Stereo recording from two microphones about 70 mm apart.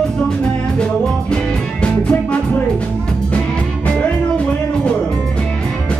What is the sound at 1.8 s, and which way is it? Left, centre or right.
Music, centre.